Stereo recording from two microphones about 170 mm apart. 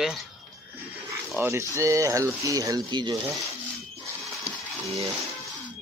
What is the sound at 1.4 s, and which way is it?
Speech, 15° right (ahead or behind).